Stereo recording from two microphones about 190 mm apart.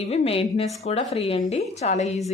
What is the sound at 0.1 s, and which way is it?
A woman's voice, 30° left (ahead or behind).